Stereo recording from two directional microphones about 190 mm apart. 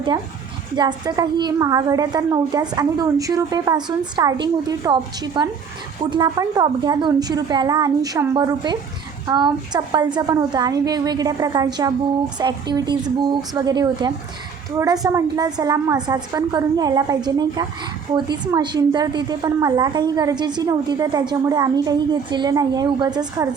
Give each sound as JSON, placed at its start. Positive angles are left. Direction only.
{"t": 0.8, "sound": "a woman's voice", "side_deg": -20}